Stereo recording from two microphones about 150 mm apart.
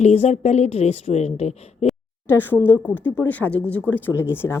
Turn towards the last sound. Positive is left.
turn(degrees=15)  # may be behind; listen again after turning